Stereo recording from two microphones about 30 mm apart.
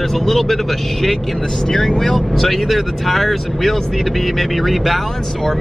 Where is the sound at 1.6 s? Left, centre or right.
Centre.